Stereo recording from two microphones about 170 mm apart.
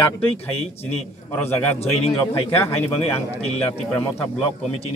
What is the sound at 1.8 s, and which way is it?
Speech, 40° left (ahead or behind).